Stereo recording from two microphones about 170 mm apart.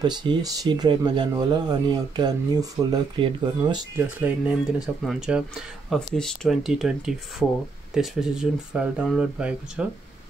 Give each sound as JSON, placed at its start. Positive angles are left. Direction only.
{"t": 0.0, "sound": "speech", "side_deg": -25}
{"t": 3.9, "sound": "speech", "side_deg": -10}